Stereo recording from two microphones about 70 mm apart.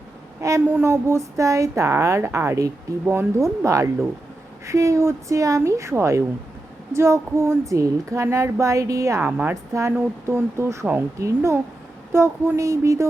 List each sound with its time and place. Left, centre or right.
0.6 s a woman's voice: right
0.9 s a woman's voice: right
7.7 s a woman's voice: right